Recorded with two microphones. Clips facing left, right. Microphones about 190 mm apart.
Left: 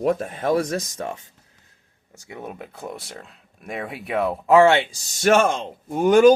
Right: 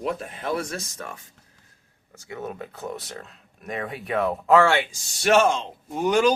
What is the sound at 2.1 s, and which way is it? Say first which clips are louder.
Speech: right 2 dB; 15° left (ahead or behind).